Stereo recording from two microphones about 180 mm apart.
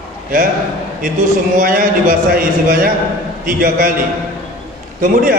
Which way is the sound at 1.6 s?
50° right (ahead or behind).